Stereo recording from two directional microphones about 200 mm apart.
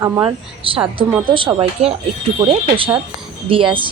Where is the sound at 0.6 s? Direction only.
25° right (ahead or behind).